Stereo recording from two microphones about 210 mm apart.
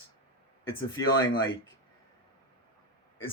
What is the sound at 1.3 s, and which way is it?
Speech, 20° left (ahead or behind).